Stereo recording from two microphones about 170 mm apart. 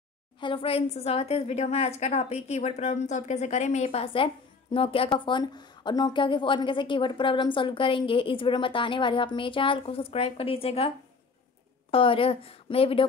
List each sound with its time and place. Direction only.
0.4 s a woman's voice: 30° left (ahead or behind)
11.9 s a woman's voice: 30° left (ahead or behind)